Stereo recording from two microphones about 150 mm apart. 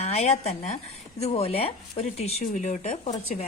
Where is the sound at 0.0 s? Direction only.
45° left (ahead or behind).